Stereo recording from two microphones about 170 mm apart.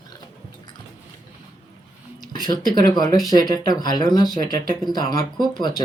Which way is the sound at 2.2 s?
25° left (ahead or behind).